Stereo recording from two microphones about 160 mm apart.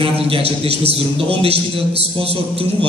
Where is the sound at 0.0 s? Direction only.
35° right (ahead or behind).